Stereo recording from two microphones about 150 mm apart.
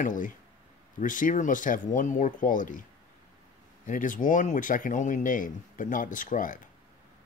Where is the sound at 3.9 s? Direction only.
60° left (ahead or behind).